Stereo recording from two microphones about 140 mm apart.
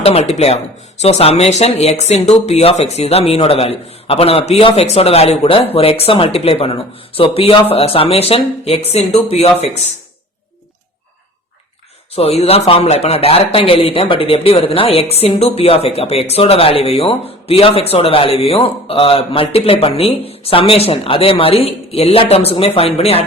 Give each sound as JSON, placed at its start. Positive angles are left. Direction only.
{"t": 0.0, "sound": "a man's voice", "side_deg": 45}
{"t": 12.1, "sound": "a man's voice", "side_deg": 45}